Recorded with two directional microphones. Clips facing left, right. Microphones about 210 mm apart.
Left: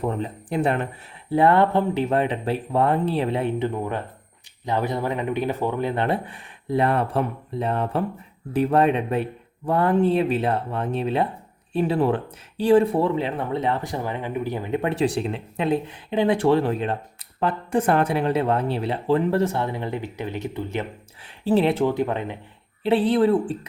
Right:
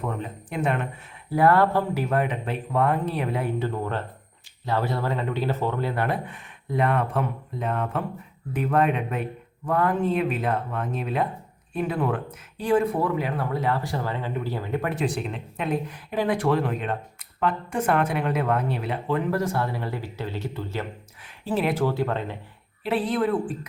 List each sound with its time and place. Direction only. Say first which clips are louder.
0.0 s a man's voice: left 5 dB; 30° left (ahead or behind)
3.7 s a man's voice: left 1 dB; 15° left (ahead or behind)
21.4 s speech: left 5 dB; 30° left (ahead or behind)
22.8 s speech: left 5 dB; 30° left (ahead or behind)